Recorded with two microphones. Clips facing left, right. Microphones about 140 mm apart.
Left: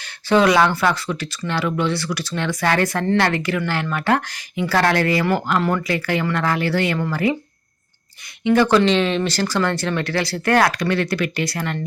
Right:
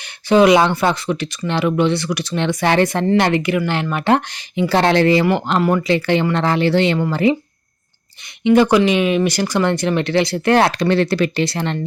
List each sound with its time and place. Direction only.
0.0 s speech: 20° right (ahead or behind)
8.4 s speech: 15° right (ahead or behind)